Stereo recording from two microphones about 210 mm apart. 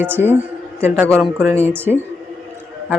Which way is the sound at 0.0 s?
10° right (ahead or behind).